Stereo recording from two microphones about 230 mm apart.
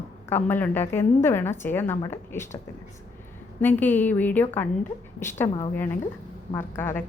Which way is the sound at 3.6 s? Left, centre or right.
Centre.